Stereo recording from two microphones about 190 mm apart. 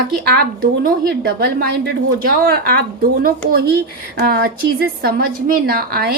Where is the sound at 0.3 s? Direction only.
55° right (ahead or behind).